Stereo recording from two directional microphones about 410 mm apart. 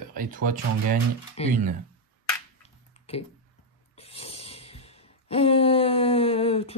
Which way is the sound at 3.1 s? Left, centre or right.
Centre.